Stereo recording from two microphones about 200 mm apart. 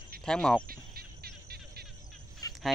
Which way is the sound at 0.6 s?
45° right (ahead or behind).